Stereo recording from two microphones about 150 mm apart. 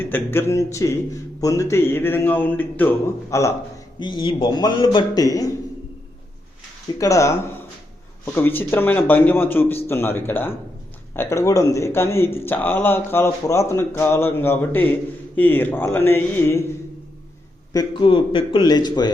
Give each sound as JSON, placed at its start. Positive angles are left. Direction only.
{"t": 0.0, "sound": "speech", "side_deg": 15}
{"t": 4.0, "sound": "a man's voice", "side_deg": 30}
{"t": 7.0, "sound": "a man's voice", "side_deg": 20}
{"t": 17.7, "sound": "a man's voice", "side_deg": 35}